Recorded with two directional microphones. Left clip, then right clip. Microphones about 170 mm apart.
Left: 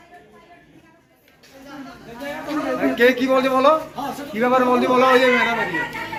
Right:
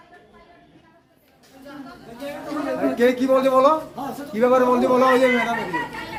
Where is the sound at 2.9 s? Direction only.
60° right (ahead or behind).